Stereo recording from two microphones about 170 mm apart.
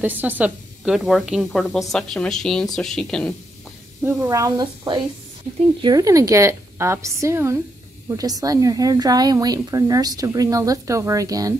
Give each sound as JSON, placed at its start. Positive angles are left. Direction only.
{"t": 0.0, "sound": "a woman's voice", "side_deg": -10}
{"t": 4.0, "sound": "a woman's voice", "side_deg": -15}